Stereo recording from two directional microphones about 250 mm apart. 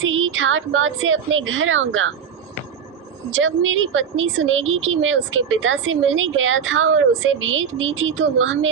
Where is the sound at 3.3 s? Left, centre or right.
Right.